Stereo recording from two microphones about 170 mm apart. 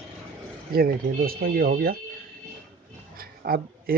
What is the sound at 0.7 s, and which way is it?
Speech, 60° right (ahead or behind).